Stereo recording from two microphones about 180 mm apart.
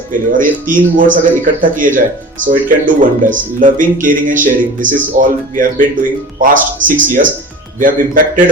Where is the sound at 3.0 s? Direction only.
50° right (ahead or behind).